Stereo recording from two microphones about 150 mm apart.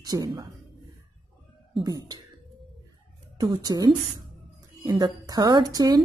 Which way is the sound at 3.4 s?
25° right (ahead or behind).